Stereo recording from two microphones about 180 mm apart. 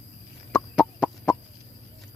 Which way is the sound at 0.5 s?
5° right (ahead or behind).